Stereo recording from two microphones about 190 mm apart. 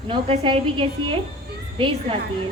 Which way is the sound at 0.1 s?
30° right (ahead or behind).